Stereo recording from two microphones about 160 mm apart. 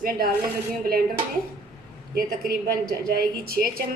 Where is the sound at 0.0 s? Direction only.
70° right (ahead or behind).